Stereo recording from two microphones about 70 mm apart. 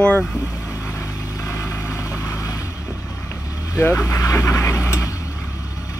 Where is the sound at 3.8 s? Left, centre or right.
Left.